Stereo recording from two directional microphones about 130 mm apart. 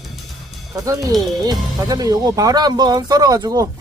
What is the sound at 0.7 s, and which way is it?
Speech, 25° right (ahead or behind).